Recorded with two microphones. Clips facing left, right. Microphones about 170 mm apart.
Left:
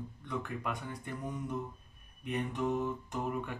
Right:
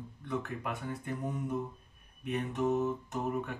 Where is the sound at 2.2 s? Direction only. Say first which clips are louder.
Right 2 dB; 5° right (ahead or behind).